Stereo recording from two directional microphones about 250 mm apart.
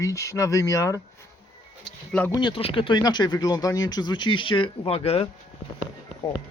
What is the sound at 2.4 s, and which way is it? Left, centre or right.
Speech, left.